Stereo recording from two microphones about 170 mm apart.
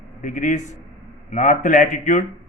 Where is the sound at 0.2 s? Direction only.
50° left (ahead or behind).